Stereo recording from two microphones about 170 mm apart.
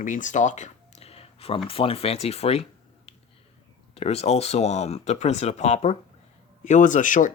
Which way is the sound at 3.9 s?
35° left (ahead or behind).